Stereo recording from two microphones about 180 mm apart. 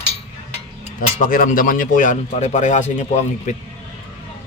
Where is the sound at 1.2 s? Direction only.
50° left (ahead or behind).